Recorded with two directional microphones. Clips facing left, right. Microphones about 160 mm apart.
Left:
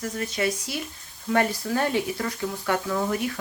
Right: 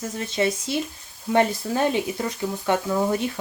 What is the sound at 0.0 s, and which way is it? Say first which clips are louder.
Speech: right 2 dB; 25° right (ahead or behind).